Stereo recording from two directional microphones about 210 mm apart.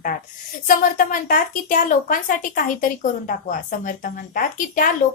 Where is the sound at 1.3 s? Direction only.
40° left (ahead or behind).